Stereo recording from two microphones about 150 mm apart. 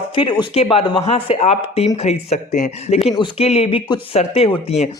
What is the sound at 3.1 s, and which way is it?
Speech, 35° left (ahead or behind).